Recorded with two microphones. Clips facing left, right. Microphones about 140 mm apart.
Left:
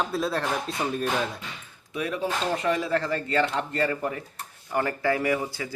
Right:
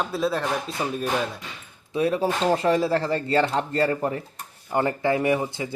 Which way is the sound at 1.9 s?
35° right (ahead or behind).